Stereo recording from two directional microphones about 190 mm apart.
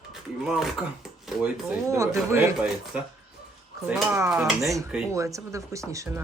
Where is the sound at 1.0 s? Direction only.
Centre (ahead or behind).